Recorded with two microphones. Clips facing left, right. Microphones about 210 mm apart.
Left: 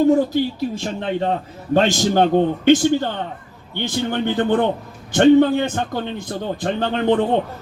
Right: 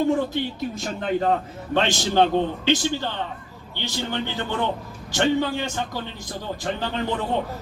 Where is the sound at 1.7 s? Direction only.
45° left (ahead or behind).